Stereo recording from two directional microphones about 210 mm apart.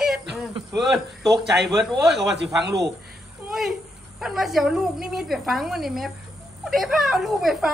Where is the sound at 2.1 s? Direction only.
55° right (ahead or behind).